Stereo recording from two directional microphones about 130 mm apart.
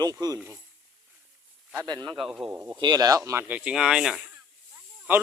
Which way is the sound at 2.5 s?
20° right (ahead or behind).